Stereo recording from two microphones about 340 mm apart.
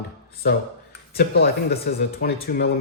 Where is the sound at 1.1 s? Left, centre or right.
Left.